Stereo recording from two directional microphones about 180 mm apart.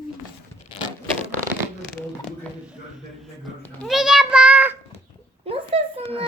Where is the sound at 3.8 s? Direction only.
Centre (ahead or behind).